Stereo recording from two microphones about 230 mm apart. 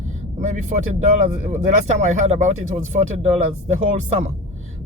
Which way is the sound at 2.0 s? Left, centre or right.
Right.